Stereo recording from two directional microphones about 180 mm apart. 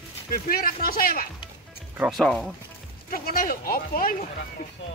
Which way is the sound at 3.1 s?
50° left (ahead or behind).